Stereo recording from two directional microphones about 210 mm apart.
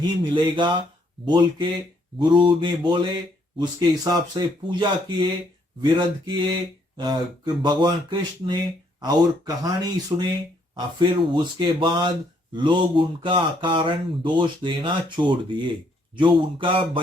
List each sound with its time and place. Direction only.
0.2 s speech: 20° right (ahead or behind)
9.0 s speech: 20° right (ahead or behind)